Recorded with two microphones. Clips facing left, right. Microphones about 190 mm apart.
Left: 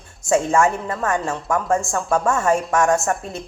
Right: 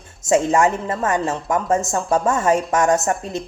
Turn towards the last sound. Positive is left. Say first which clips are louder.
# right 1 dB
turn(degrees=-20)  # may be behind; listen again after turning